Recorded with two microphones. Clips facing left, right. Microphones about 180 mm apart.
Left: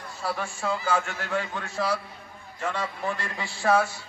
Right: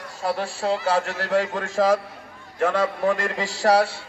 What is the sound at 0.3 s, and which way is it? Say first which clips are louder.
Speech: right 6 dB; 35° right (ahead or behind).